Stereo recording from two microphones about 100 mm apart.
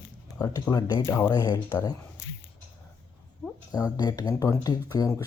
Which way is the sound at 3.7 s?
40° left (ahead or behind).